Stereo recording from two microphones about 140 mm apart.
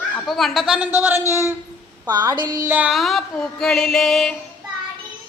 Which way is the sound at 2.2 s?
30° right (ahead or behind).